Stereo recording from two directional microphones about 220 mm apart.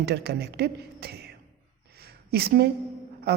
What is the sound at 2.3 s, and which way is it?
Speech, 45° right (ahead or behind).